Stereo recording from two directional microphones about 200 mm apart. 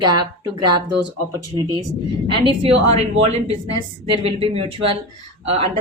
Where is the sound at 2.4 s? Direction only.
30° right (ahead or behind).